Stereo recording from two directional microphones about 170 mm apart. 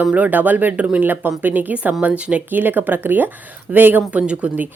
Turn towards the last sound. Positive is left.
turn(degrees=-10)  # may be behind; listen again after turning